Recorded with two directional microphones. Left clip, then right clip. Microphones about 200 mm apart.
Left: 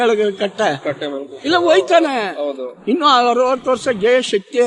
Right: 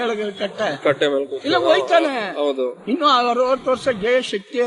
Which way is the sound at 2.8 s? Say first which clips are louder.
Left 4 dB; 60° left (ahead or behind).